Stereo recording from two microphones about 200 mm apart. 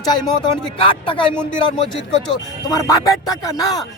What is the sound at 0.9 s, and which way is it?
Speech, 25° left (ahead or behind).